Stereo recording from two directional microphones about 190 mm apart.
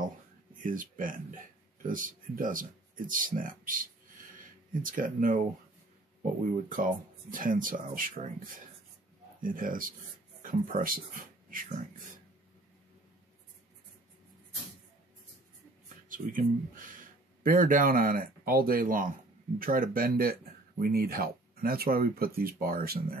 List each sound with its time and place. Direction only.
0.6 s speech: 45° right (ahead or behind)
6.4 s speech: 45° right (ahead or behind)
9.4 s speech: 45° right (ahead or behind)
16.1 s speech: 45° right (ahead or behind)